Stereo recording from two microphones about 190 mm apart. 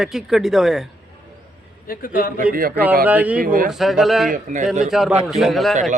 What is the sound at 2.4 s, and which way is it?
Speech, 50° right (ahead or behind).